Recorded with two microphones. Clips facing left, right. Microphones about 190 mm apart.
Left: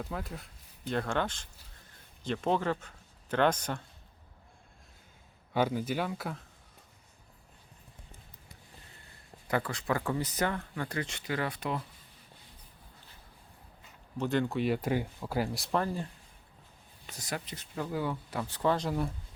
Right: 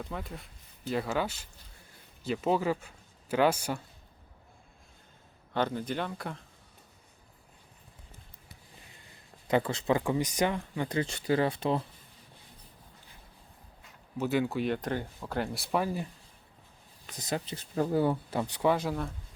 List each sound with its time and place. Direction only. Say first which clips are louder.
0.0 s speech: left 1 dB; centre (ahead or behind)
5.5 s speech: left 1 dB; 10° left (ahead or behind)
9.5 s speech: right 4 dB; 20° right (ahead or behind)
11.0 s speech: right 7 dB; 30° right (ahead or behind)
14.2 s speech: right 1 dB; 5° right (ahead or behind)
17.2 s speech: right 4 dB; 25° right (ahead or behind)
18.5 s speech: right 2 dB; 10° right (ahead or behind)